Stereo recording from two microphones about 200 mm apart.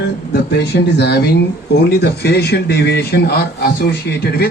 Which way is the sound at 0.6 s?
55° left (ahead or behind).